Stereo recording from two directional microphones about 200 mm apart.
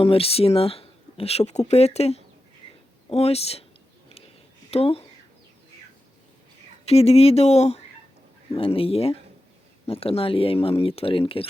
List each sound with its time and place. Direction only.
0.0 s speech: 30° left (ahead or behind)
4.7 s speech: 30° left (ahead or behind)
6.8 s speech: 30° left (ahead or behind)